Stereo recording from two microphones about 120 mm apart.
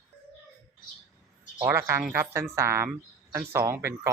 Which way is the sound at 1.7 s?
20° right (ahead or behind).